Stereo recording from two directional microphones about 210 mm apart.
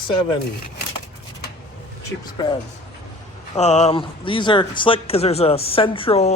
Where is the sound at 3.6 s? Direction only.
30° left (ahead or behind).